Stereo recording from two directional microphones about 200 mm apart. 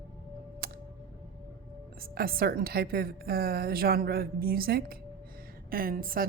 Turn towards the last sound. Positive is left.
turn(degrees=-45)  # may be behind; listen again after turning